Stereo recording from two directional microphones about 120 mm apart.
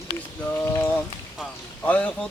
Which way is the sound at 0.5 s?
20° left (ahead or behind).